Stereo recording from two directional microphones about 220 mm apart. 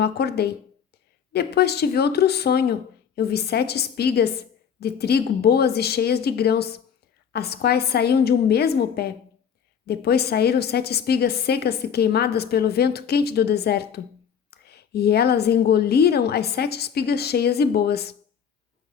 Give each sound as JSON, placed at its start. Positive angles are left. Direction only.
{"t": 0.0, "sound": "a woman's voice", "side_deg": 45}